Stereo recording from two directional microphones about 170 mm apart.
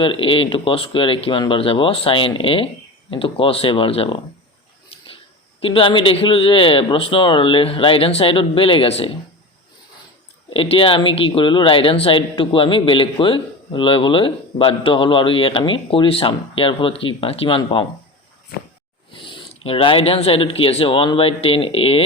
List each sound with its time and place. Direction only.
0.0 s speech: 30° left (ahead or behind)
5.6 s speech: 30° left (ahead or behind)
10.5 s speech: 30° left (ahead or behind)
19.1 s speech: 30° left (ahead or behind)